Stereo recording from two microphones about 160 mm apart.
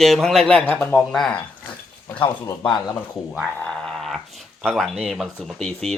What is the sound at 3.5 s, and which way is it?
Speech, 5° left (ahead or behind).